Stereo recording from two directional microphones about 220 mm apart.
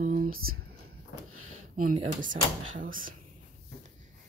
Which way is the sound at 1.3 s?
75° right (ahead or behind).